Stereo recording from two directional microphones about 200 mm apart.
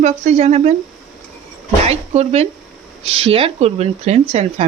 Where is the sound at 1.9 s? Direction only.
30° right (ahead or behind).